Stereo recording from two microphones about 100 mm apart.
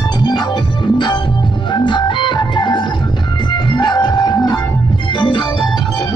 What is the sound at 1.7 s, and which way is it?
Organ, 50° left (ahead or behind).